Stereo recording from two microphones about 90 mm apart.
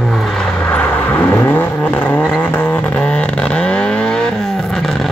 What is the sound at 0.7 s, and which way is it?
Vehicle, 20° left (ahead or behind).